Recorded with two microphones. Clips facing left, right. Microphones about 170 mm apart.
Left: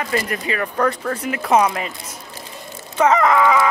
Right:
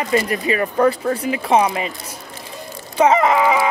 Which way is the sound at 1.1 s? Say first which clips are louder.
Right 1 dB; 30° right (ahead or behind).